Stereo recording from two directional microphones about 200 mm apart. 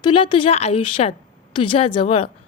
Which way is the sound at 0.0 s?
25° left (ahead or behind).